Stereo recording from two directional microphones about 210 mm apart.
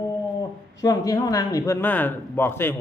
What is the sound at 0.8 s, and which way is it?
Speech, 15° left (ahead or behind).